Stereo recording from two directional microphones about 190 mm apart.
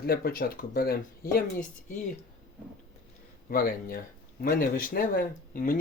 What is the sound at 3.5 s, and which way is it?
Speech, 50° left (ahead or behind).